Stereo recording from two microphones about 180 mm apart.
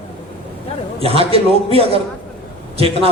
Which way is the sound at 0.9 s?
35° right (ahead or behind).